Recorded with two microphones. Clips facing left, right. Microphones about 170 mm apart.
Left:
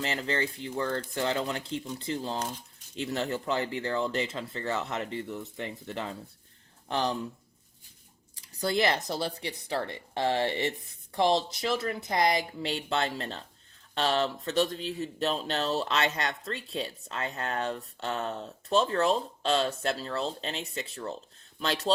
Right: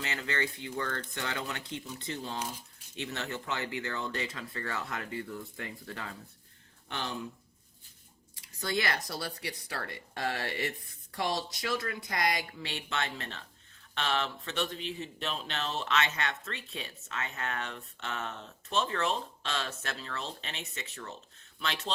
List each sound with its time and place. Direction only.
0.0 s speech: 30° left (ahead or behind)
6.8 s speech: 35° left (ahead or behind)
8.9 s speech: 25° left (ahead or behind)